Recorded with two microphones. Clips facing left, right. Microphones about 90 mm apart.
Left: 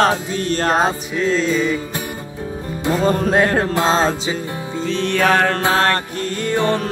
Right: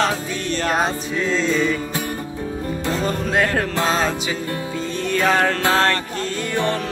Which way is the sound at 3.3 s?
25° left (ahead or behind).